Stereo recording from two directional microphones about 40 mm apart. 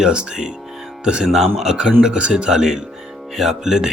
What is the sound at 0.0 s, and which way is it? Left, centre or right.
Speech, right.